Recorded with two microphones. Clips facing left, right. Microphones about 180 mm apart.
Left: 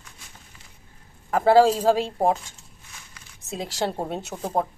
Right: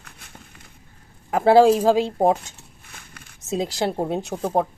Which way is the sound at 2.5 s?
55° right (ahead or behind).